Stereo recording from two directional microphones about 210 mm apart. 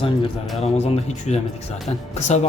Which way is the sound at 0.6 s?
30° left (ahead or behind).